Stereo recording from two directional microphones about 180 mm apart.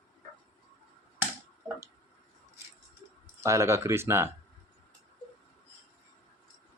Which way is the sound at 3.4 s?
15° right (ahead or behind).